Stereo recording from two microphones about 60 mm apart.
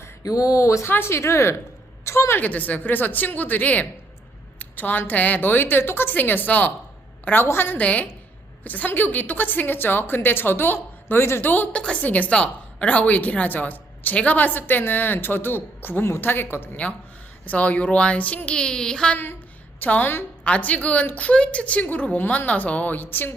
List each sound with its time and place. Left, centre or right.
0.2 s speech: left
0.9 s a woman's voice: left
1.1 s a woman's voice: left
2.4 s a woman's voice: left
7.3 s a woman's voice: left
7.8 s a woman's voice: left
17.4 s a woman's voice: left
18.5 s speech: centre
19.1 s a woman's voice: left
20.4 s a woman's voice: left